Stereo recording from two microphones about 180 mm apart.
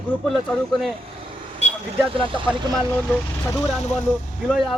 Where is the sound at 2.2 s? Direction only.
30° right (ahead or behind).